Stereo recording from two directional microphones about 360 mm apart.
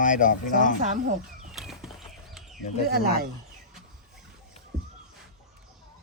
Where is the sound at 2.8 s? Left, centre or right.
Right.